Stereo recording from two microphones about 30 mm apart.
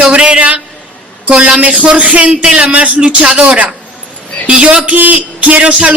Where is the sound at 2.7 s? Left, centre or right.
Right.